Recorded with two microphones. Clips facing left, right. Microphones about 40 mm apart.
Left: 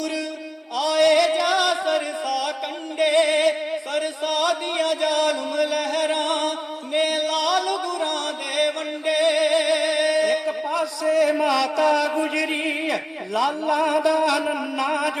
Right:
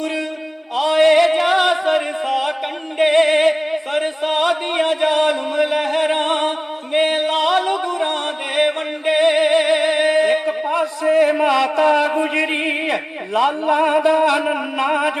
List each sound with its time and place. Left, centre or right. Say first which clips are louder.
0.8 s music: right 5 dB; right
3.0 s chant: right 5 dB; right
6.9 s music: right 5 dB; right